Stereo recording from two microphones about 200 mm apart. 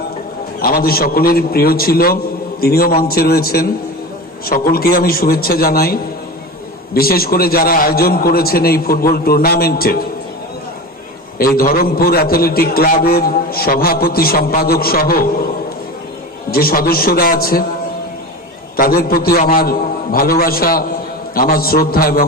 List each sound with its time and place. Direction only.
0.6 s a man's voice: 45° left (ahead or behind)
11.3 s a man's voice: 45° left (ahead or behind)
16.5 s a man's voice: 50° left (ahead or behind)
18.8 s a man's voice: 45° left (ahead or behind)